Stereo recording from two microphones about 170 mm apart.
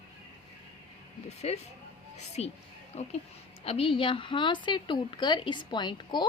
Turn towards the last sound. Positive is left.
turn(degrees=25)  # may be behind; listen again after turning